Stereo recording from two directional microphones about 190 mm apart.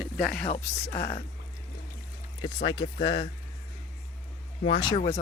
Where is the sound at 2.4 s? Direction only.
25° left (ahead or behind).